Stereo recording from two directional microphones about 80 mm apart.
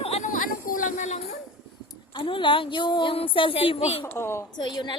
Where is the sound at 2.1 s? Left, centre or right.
Left.